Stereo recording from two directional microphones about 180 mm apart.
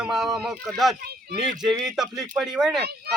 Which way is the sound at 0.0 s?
Centre (ahead or behind).